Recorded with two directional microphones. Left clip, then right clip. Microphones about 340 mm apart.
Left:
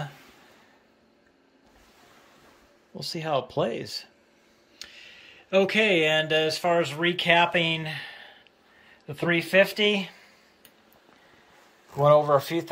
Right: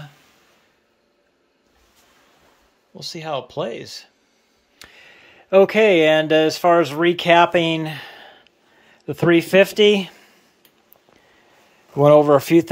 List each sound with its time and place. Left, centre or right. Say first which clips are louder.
2.9 s speech: right 1 dB; centre
4.7 s speech: right 1 dB; centre
12.1 s speech: right 7 dB; right